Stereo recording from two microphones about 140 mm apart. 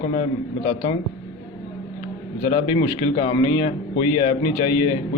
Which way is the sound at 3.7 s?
45° left (ahead or behind).